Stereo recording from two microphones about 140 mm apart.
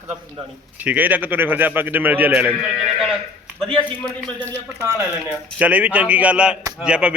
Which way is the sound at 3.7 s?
35° right (ahead or behind).